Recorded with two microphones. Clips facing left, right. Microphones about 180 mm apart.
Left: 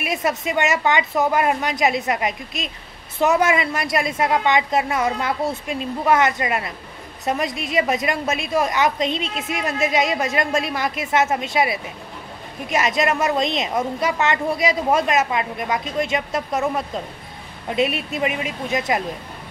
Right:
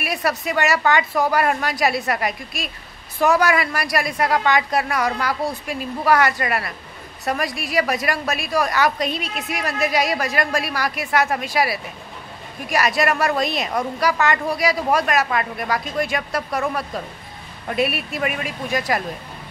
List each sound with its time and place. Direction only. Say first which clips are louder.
0.0 s a woman's voice: left 1 dB; 20° left (ahead or behind)